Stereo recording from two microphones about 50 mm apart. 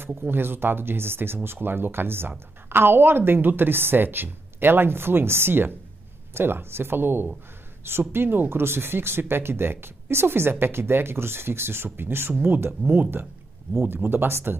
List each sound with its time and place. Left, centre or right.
0.0 s speech: right